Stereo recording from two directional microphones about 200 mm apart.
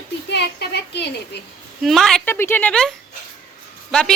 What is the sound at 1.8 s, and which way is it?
A woman's voice, centre (ahead or behind).